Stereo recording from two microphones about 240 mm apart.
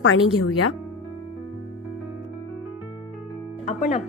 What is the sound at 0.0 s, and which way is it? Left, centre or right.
Speech, left.